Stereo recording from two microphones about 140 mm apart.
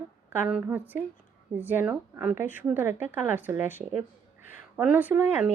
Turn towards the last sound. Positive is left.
turn(degrees=-10)  # may be behind; listen again after turning